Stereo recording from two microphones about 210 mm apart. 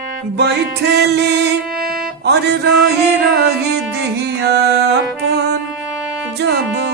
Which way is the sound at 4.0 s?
55° right (ahead or behind).